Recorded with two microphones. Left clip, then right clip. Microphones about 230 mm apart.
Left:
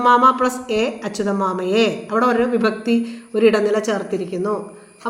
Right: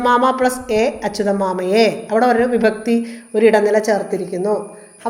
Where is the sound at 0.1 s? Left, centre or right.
Centre.